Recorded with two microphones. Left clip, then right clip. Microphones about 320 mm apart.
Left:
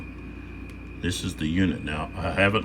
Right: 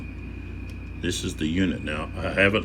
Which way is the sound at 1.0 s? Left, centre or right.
Centre.